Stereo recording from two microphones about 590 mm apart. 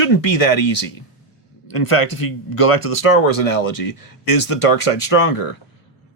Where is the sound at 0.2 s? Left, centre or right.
Left.